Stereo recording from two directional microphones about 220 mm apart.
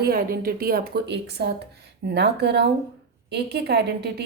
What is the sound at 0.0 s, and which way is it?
A woman's voice, 40° right (ahead or behind).